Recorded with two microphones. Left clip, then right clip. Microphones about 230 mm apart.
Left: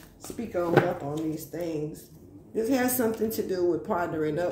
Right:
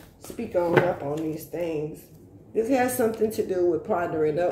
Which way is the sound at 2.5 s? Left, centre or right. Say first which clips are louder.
Right 3 dB; left.